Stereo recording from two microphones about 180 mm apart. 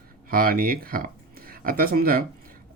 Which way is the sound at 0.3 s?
55° right (ahead or behind).